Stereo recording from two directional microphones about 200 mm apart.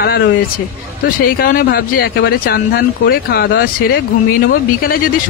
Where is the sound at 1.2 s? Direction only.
45° left (ahead or behind).